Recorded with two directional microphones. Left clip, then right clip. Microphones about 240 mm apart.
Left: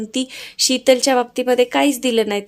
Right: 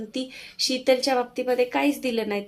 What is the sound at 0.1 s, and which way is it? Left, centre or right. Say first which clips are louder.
Speech: left 8 dB; left.